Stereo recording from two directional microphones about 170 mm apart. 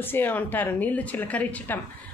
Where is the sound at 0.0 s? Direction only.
10° left (ahead or behind).